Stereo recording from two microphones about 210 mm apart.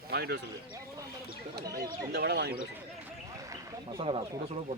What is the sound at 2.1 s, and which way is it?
Speech, 50° right (ahead or behind).